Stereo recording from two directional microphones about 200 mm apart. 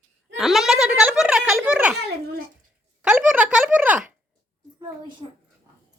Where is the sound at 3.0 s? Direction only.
5° right (ahead or behind).